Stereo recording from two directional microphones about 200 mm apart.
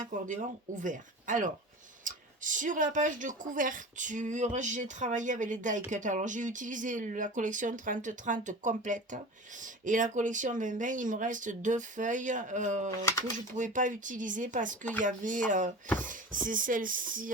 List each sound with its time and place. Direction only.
0.3 s a woman's voice: 40° right (ahead or behind)